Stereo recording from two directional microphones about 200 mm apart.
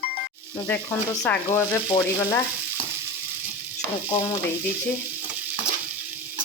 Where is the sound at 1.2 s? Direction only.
10° left (ahead or behind).